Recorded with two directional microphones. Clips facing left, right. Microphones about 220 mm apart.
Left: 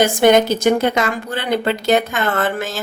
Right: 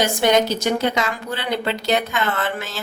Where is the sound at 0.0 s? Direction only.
50° left (ahead or behind).